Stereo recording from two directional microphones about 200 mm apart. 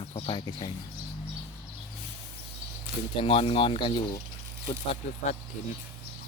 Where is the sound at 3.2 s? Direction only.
25° left (ahead or behind).